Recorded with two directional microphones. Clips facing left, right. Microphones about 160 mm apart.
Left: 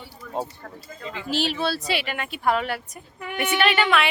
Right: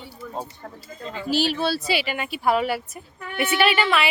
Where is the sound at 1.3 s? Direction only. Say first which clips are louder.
Right 2 dB; centre (ahead or behind).